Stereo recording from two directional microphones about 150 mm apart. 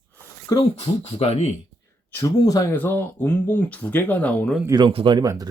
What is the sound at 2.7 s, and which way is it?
Speech, 10° left (ahead or behind).